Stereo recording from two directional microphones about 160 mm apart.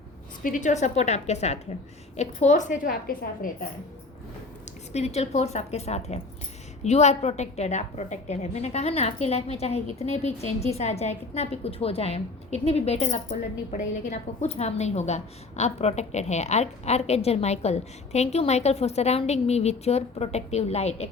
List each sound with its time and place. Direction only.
0.4 s a woman's voice: 55° left (ahead or behind)
4.9 s a woman's voice: 45° left (ahead or behind)